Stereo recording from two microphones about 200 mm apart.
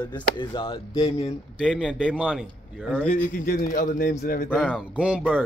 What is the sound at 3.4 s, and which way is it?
A man's voice, 50° left (ahead or behind).